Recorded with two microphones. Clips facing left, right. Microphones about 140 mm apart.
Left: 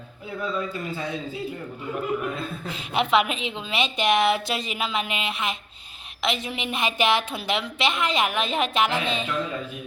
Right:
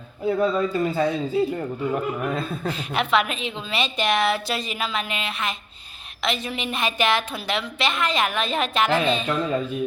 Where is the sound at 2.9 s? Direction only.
20° left (ahead or behind).